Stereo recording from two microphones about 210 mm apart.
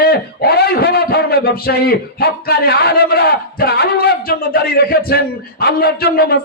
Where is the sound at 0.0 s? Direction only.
45° left (ahead or behind).